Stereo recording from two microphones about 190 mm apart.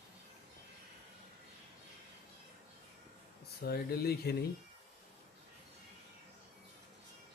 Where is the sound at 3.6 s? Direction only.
55° left (ahead or behind).